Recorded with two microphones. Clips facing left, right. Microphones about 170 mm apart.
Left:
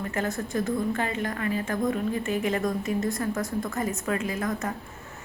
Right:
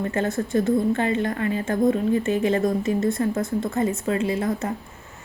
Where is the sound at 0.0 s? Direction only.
30° right (ahead or behind).